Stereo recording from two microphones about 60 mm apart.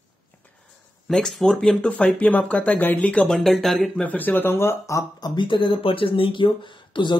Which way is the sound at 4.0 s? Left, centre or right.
Left.